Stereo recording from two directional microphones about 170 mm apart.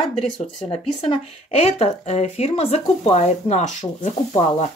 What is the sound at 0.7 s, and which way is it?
Speech, 35° left (ahead or behind).